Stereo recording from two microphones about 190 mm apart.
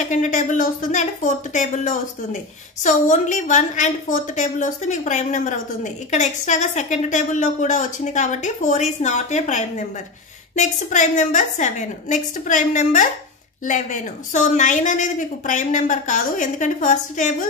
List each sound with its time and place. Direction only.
0.1 s a woman's voice: 40° left (ahead or behind)